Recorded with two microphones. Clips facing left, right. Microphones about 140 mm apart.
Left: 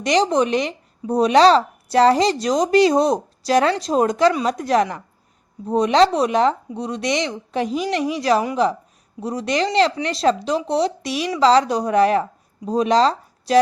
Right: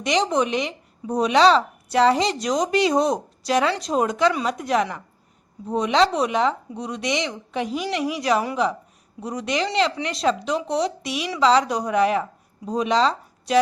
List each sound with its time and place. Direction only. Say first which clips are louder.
0.0 s speech: left 4 dB; 35° left (ahead or behind)